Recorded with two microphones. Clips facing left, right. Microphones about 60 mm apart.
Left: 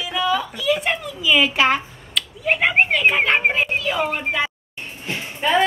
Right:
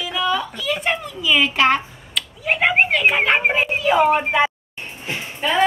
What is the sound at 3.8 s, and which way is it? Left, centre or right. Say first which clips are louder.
Speech: right 7 dB; right.